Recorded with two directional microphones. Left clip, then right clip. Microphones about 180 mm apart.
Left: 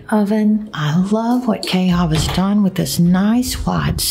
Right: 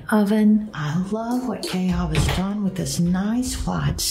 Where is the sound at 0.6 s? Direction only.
50° left (ahead or behind).